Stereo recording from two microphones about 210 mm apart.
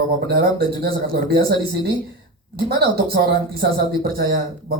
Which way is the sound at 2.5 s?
50° right (ahead or behind).